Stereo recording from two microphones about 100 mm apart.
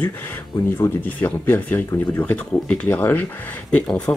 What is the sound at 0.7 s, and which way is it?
Speech, 20° left (ahead or behind).